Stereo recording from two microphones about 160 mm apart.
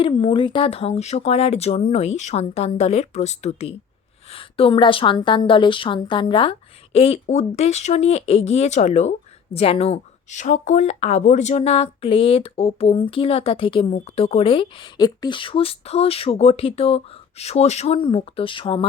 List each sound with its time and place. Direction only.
0.0 s a woman's voice: 30° left (ahead or behind)